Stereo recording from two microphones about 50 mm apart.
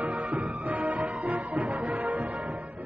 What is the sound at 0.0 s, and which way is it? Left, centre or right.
Music, right.